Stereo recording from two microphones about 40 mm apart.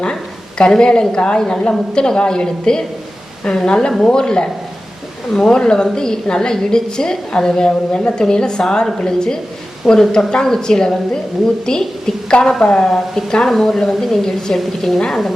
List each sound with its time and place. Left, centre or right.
0.6 s a woman's voice: left